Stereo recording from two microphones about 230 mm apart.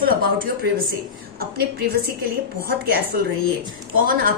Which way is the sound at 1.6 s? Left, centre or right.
Right.